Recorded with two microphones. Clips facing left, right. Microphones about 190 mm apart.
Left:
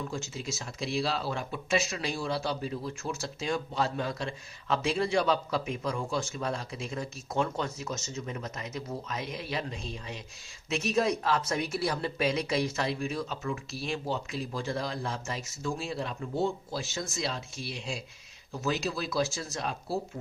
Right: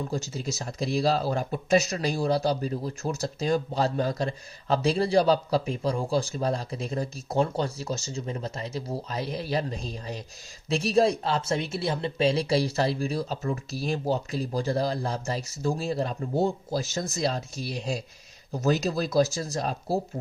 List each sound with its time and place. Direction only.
0.1 s speech: 35° right (ahead or behind)